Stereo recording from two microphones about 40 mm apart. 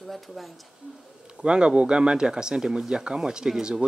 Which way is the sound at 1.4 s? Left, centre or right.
Right.